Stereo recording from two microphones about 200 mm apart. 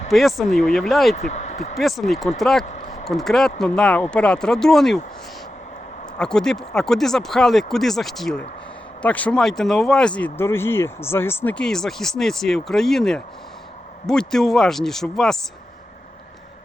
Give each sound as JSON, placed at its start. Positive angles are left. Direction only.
{"t": 0.1, "sound": "speech", "side_deg": 0}
{"t": 1.1, "sound": "speech", "side_deg": 35}
{"t": 1.7, "sound": "speech", "side_deg": 0}
{"t": 6.1, "sound": "speech", "side_deg": 5}